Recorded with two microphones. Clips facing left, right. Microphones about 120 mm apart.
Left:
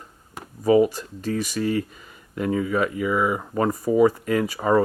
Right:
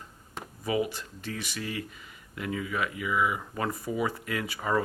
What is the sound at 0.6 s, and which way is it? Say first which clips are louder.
Speech: left 12 dB; 40° left (ahead or behind).